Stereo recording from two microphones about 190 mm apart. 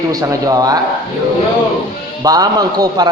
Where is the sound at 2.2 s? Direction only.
20° right (ahead or behind).